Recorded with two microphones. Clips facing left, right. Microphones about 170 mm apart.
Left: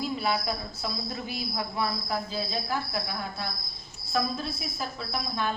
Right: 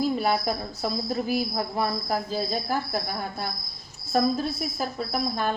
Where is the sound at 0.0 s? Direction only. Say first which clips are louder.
Right 5 dB; 45° right (ahead or behind).